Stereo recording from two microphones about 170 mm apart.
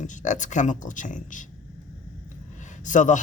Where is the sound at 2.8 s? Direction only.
45° left (ahead or behind).